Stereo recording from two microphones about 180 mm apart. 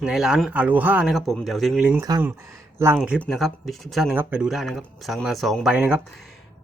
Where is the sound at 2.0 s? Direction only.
20° right (ahead or behind).